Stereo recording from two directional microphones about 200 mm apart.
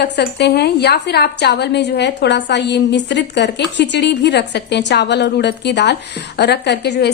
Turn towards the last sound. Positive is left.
turn(degrees=55)  # may be behind; listen again after turning